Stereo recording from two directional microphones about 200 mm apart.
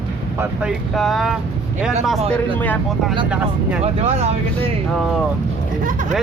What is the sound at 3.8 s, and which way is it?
Speech, 30° right (ahead or behind).